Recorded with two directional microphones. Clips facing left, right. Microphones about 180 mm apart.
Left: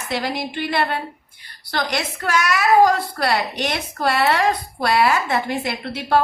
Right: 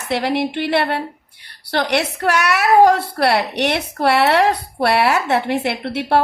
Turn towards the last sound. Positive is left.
turn(degrees=-70)  # may be behind; listen again after turning